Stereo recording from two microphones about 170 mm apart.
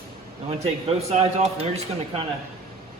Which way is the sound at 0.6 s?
35° right (ahead or behind).